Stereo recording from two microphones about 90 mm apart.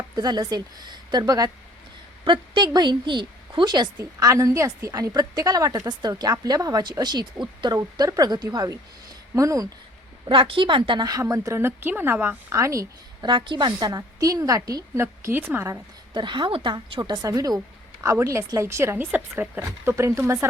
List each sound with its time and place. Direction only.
0.2 s a woman's voice: 50° right (ahead or behind)
2.2 s a woman's voice: 60° right (ahead or behind)
4.2 s a woman's voice: 40° right (ahead or behind)
7.8 s a woman's voice: 40° right (ahead or behind)
8.4 s a woman's voice: 35° right (ahead or behind)
10.2 s a woman's voice: 75° right (ahead or behind); by 12.5 s 25° right (ahead or behind)
12.5 s a woman's voice: 35° right (ahead or behind)
13.2 s a woman's voice: 60° right (ahead or behind); by 15.0 s 40° right (ahead or behind)
15.0 s speech: 25° right (ahead or behind)
16.1 s a woman's voice: 60° right (ahead or behind)
17.0 s a woman's voice: 50° right (ahead or behind); by 20.5 s 30° right (ahead or behind)